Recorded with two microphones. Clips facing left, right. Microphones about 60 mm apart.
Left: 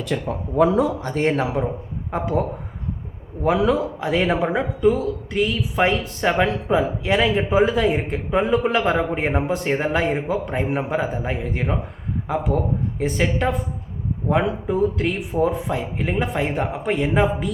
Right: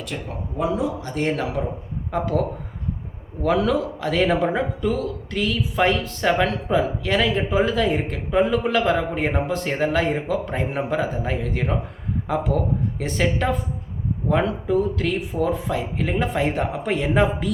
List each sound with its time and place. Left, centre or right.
0.6 s speech: left
1.2 s speech: left
2.0 s speech: centre
3.4 s speech: centre
10.5 s speech: centre
14.7 s speech: centre